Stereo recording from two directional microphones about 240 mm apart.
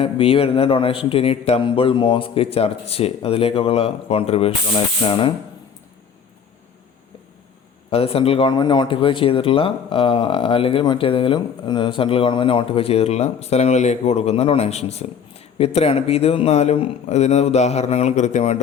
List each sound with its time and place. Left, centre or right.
0.0 s speech: left
7.9 s speech: left